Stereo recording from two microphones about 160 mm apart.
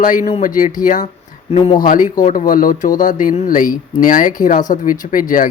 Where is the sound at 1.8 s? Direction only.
60° left (ahead or behind).